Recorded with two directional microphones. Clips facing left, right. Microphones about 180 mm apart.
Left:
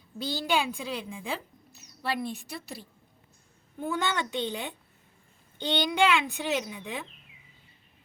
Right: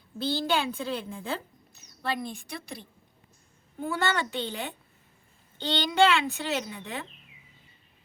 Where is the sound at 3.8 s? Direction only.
15° left (ahead or behind).